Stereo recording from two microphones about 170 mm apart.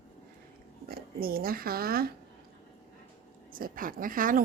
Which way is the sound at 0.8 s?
60° right (ahead or behind).